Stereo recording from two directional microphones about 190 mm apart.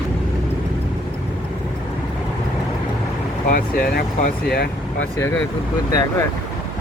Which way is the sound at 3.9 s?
55° left (ahead or behind).